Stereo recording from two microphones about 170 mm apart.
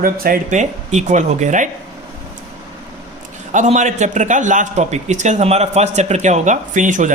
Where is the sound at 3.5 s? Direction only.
45° right (ahead or behind).